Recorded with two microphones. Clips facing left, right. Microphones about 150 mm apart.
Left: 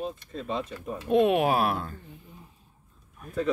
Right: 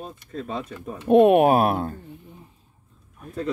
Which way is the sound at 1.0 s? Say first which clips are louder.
Right 7 dB; 55° right (ahead or behind).